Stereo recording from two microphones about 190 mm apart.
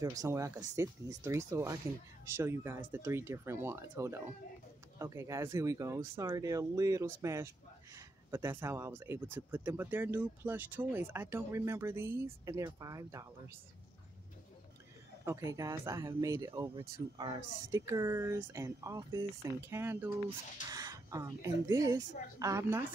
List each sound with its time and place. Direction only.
0.0 s speech: 15° right (ahead or behind)
15.2 s speech: 15° right (ahead or behind)